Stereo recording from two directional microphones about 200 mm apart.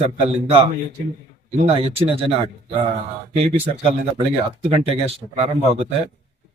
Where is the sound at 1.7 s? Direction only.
30° right (ahead or behind).